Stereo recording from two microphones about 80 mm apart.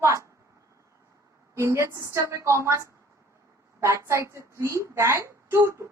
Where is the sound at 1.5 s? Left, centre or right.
Right.